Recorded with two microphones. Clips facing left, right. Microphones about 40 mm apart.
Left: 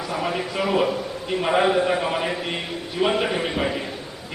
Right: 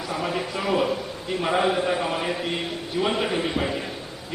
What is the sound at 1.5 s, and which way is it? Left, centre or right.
A man's voice, centre.